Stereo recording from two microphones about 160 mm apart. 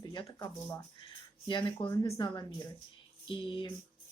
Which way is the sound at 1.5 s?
30° left (ahead or behind).